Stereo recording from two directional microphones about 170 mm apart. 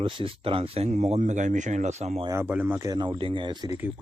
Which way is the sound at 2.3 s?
15° right (ahead or behind).